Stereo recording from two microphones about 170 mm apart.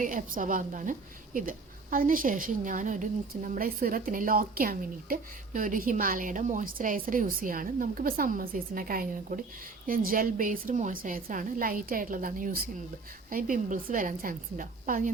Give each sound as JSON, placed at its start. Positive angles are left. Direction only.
{"t": 0.0, "sound": "a woman's voice", "side_deg": -50}